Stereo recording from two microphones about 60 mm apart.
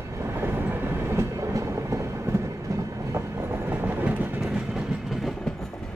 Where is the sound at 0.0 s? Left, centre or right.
Right.